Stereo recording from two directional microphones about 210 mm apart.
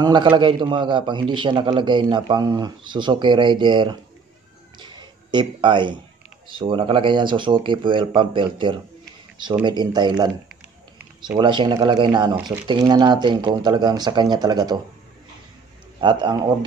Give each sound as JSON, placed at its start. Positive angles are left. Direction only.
{"t": 0.0, "sound": "a man's voice", "side_deg": -20}
{"t": 4.7, "sound": "a sound", "side_deg": -20}
{"t": 6.5, "sound": "a man's voice", "side_deg": -25}
{"t": 16.0, "sound": "a man's voice", "side_deg": -20}